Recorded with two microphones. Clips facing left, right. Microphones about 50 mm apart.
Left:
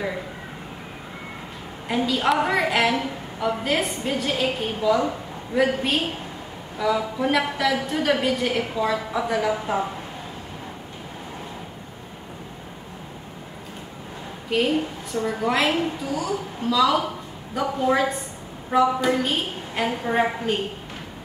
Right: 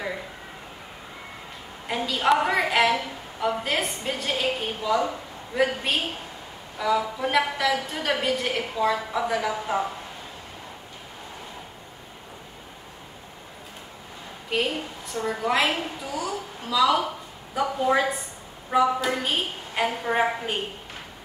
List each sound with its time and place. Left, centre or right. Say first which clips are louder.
1.9 s a woman's voice: left 1 dB; centre
14.5 s a woman's voice: left 5 dB; centre